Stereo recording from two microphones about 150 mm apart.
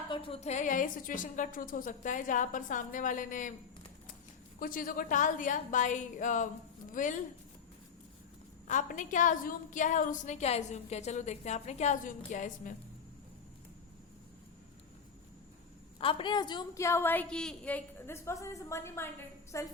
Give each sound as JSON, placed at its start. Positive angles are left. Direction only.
{"t": 0.1, "sound": "a woman's voice", "side_deg": 35}
{"t": 4.6, "sound": "a woman's voice", "side_deg": 65}
{"t": 8.6, "sound": "a woman's voice", "side_deg": 55}
{"t": 16.0, "sound": "a woman's voice", "side_deg": 35}
{"t": 16.8, "sound": "a woman's voice", "side_deg": 15}